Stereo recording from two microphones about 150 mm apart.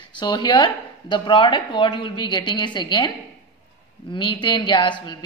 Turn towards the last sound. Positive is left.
turn(degrees=30)  # may be behind; listen again after turning